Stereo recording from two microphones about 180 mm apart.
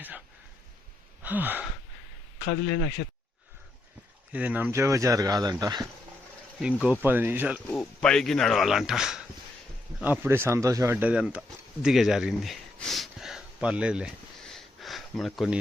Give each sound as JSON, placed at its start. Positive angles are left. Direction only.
{"t": 1.2, "sound": "gasp", "side_deg": -10}
{"t": 4.3, "sound": "speech", "side_deg": -10}
{"t": 6.6, "sound": "speech", "side_deg": -5}
{"t": 7.8, "sound": "speech", "side_deg": 5}